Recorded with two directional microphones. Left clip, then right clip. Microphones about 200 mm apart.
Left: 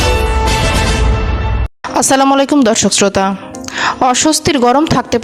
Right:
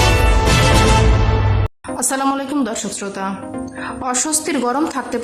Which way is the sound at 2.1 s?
50° left (ahead or behind).